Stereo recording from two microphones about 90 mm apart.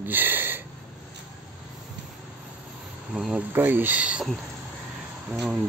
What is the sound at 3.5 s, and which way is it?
Speech, 20° right (ahead or behind).